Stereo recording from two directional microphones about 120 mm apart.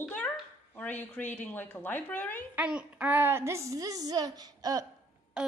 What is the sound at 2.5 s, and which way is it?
A woman's voice, 10° right (ahead or behind).